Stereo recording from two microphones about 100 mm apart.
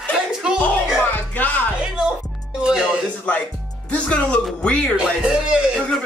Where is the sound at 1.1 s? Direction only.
15° left (ahead or behind).